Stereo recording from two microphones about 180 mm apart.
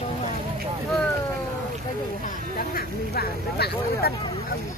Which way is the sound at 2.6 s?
55° left (ahead or behind).